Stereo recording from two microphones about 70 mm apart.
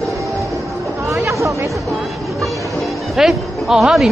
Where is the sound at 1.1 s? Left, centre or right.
Right.